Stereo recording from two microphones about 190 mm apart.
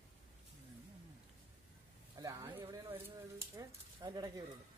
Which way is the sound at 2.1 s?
20° right (ahead or behind).